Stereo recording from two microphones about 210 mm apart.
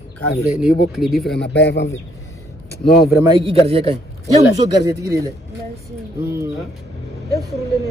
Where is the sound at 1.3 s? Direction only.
55° left (ahead or behind).